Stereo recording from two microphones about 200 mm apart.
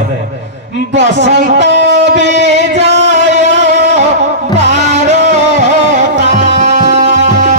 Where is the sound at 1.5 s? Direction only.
60° right (ahead or behind).